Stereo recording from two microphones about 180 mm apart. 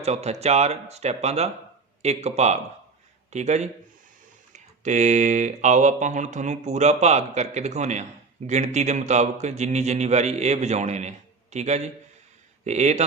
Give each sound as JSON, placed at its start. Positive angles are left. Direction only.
{"t": 0.0, "sound": "speech", "side_deg": -35}